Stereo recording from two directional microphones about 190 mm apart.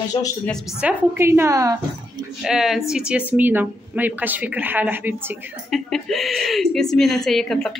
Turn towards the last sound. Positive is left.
turn(degrees=5)  # may be behind; listen again after turning